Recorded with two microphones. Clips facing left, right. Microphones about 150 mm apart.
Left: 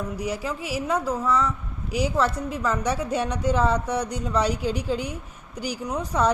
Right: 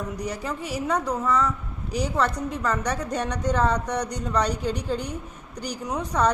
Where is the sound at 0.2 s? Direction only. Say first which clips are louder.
Left 1 dB; 5° left (ahead or behind).